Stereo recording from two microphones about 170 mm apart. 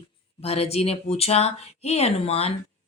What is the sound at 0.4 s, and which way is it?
A woman's voice, 35° left (ahead or behind).